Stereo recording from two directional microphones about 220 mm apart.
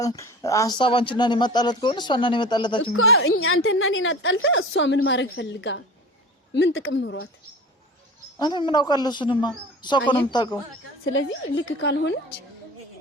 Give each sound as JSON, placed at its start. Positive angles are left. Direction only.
{"t": 0.0, "sound": "speech", "side_deg": 15}
{"t": 2.9, "sound": "a woman's voice", "side_deg": 70}
{"t": 8.4, "sound": "speech", "side_deg": 20}
{"t": 11.0, "sound": "a woman's voice", "side_deg": 55}